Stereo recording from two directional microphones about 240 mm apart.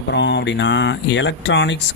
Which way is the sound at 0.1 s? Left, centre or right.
Left.